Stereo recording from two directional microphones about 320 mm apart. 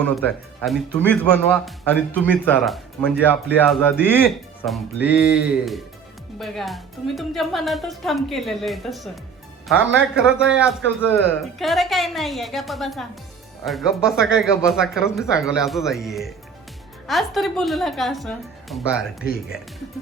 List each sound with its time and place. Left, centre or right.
0.6 s a woman's voice: centre
10.4 s a woman's voice: centre
19.2 s speech: left